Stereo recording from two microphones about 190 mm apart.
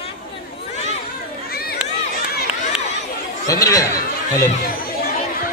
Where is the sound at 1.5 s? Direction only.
55° left (ahead or behind).